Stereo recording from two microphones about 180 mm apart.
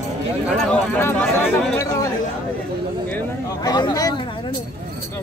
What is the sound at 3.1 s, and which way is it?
Speech, 10° left (ahead or behind).